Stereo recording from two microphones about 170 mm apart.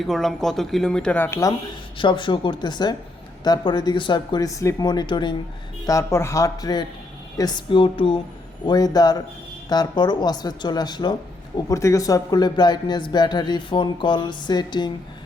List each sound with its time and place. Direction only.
0.0 s speech: centre (ahead or behind); by 8.2 s 35° left (ahead or behind)
8.6 s speech: 25° left (ahead or behind)